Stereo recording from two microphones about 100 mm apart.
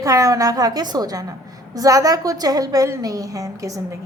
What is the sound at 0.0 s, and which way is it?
A woman's voice, 35° right (ahead or behind).